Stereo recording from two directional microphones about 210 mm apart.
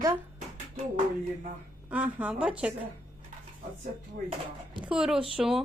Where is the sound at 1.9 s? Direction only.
5° right (ahead or behind).